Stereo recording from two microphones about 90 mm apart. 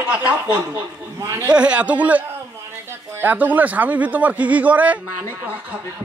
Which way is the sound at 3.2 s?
20° right (ahead or behind).